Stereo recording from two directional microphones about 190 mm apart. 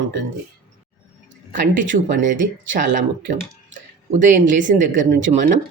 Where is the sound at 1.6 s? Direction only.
45° right (ahead or behind).